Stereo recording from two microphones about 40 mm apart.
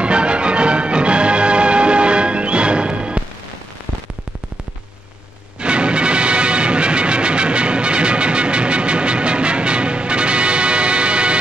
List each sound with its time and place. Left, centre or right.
0.0 s music: right
5.6 s music: right